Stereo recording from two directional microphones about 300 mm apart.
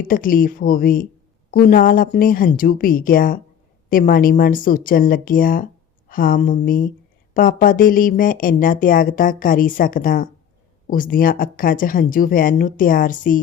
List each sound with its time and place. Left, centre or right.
0.0 s speech: left